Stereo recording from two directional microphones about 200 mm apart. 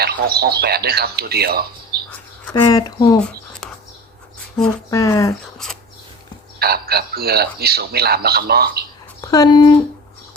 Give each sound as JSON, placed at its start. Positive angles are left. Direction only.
{"t": 0.0, "sound": "speech", "side_deg": -50}
{"t": 2.5, "sound": "speech", "side_deg": 20}
{"t": 4.9, "sound": "speech", "side_deg": 15}
{"t": 6.6, "sound": "speech", "side_deg": -50}
{"t": 9.2, "sound": "speech", "side_deg": 20}